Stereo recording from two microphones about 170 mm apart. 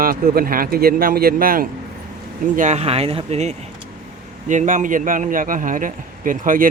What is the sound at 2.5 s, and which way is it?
A man's voice, 45° right (ahead or behind).